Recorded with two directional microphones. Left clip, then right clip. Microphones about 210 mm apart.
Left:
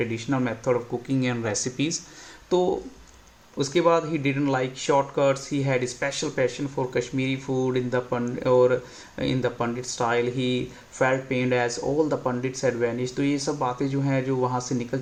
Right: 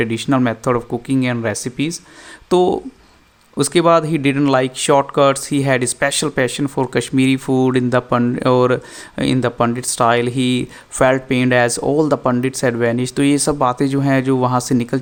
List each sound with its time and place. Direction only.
0.0 s speech: 50° right (ahead or behind)
2.5 s speech: 50° right (ahead or behind)